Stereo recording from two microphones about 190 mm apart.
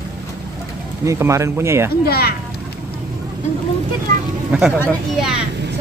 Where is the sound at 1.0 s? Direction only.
15° right (ahead or behind).